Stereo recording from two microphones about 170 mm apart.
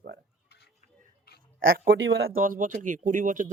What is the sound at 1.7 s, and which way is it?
Speech, 60° right (ahead or behind).